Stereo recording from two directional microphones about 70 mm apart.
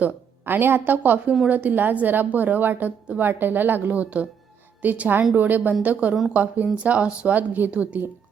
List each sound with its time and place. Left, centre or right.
0.0 s a woman's voice: right